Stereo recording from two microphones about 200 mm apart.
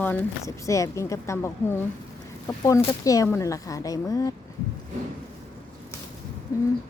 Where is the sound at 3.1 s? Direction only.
15° left (ahead or behind).